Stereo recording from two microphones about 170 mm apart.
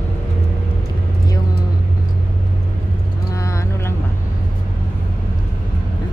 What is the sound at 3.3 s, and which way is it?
Vehicle, 20° left (ahead or behind).